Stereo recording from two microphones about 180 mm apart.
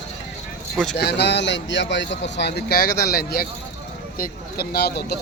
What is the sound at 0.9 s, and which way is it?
Speech, 65° left (ahead or behind).